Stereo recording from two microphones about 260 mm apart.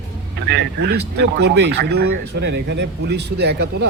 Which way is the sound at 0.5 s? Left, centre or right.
Right.